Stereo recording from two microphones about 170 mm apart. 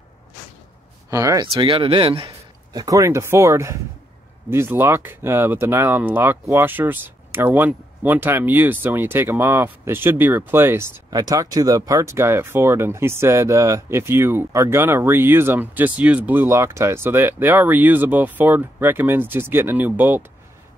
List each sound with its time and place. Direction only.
1.1 s speech: 20° right (ahead or behind)